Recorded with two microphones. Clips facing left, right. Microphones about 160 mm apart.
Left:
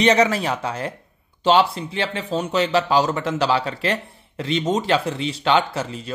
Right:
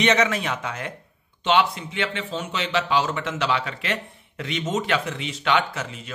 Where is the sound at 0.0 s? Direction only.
35° left (ahead or behind).